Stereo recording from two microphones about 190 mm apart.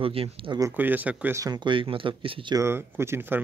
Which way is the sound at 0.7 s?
10° right (ahead or behind).